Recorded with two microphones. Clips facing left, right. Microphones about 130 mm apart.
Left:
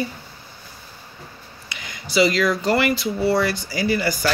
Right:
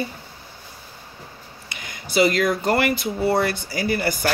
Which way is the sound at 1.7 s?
50° right (ahead or behind).